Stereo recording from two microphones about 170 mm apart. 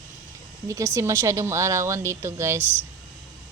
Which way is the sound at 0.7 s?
15° right (ahead or behind).